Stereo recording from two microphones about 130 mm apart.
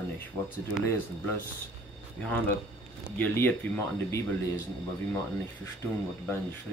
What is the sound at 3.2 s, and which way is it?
Speech, 15° left (ahead or behind).